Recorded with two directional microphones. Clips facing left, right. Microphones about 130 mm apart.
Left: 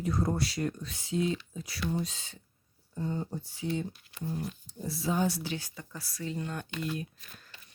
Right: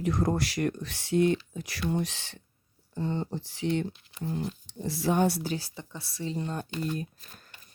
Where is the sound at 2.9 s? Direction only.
90° right; by 5.4 s 65° right (ahead or behind).